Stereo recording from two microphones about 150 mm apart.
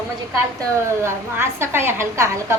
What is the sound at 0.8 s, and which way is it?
A woman's voice, 15° right (ahead or behind).